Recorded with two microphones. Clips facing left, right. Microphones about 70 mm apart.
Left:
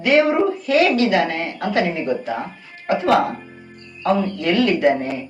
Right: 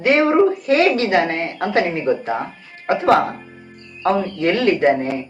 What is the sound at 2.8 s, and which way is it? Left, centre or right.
Speech, right.